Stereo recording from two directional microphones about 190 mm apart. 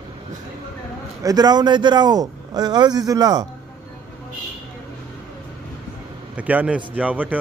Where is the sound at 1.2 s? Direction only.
20° right (ahead or behind).